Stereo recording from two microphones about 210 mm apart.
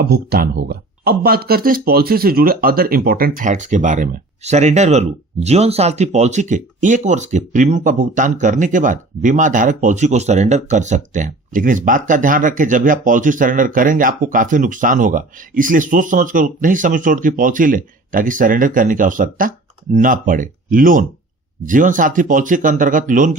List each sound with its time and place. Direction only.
0.0 s speech: 50° right (ahead or behind)